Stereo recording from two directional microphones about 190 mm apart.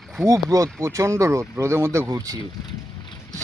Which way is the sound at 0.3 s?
15° right (ahead or behind).